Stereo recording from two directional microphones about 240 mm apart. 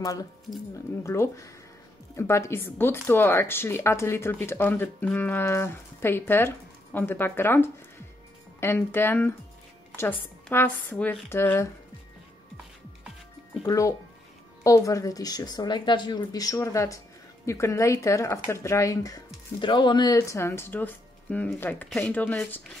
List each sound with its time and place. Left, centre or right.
0.0 s a woman's voice: centre
13.6 s a woman's voice: centre